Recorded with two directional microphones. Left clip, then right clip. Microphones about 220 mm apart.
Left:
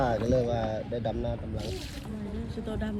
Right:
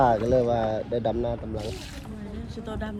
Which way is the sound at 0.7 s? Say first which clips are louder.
Right 6 dB; 90° right.